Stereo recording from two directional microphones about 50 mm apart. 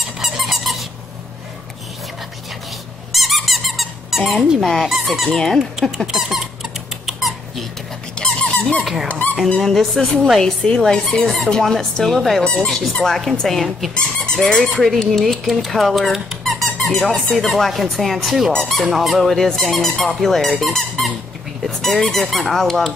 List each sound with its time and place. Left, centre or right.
0.0 s squeak: centre
3.1 s squeak: centre
4.6 s speech: centre
6.1 s squeak: centre
8.1 s squeak: centre
9.6 s speech: centre
13.9 s speech: centre
20.6 s squeak: centre
21.6 s speech: centre